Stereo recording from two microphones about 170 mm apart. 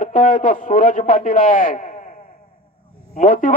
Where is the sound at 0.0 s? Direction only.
55° left (ahead or behind).